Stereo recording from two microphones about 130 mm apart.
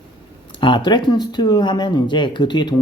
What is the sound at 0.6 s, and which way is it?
Speech, 35° left (ahead or behind).